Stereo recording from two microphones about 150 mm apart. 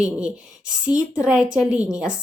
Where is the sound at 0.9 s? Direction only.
20° left (ahead or behind).